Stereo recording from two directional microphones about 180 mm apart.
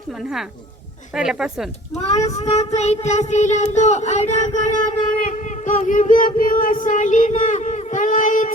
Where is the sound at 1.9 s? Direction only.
40° left (ahead or behind).